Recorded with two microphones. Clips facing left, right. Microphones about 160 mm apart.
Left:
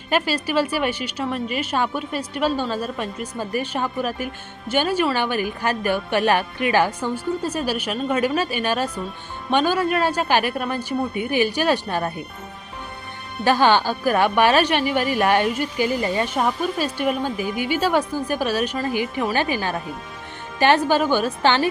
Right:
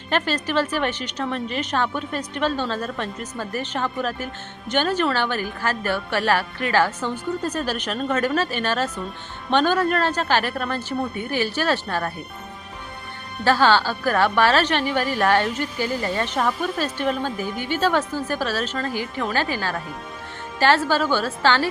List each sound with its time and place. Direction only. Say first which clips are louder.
0.1 s a woman's voice: left 1 dB; 10° left (ahead or behind)
13.4 s a woman's voice: left 1 dB; 15° left (ahead or behind)